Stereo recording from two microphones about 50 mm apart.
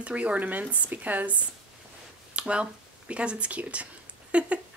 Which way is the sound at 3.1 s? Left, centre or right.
Right.